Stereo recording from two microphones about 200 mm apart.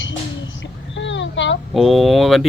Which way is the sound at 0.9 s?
65° left (ahead or behind).